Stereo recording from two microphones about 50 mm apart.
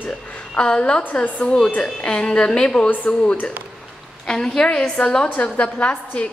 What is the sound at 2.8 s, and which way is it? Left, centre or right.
Speech, left.